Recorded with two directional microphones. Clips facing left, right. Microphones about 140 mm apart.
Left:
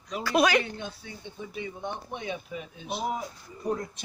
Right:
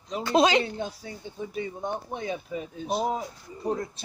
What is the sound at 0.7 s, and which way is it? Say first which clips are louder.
Speech: right 5 dB; 35° right (ahead or behind).